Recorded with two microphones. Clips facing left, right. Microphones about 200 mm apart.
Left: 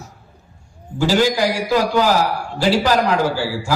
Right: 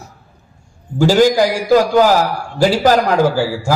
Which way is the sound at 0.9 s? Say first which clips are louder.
Right 5 dB; 45° right (ahead or behind).